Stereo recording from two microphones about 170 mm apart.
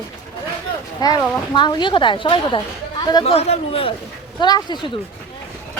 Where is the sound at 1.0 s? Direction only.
20° left (ahead or behind).